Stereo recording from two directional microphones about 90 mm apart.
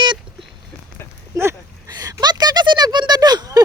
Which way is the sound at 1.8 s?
45° right (ahead or behind).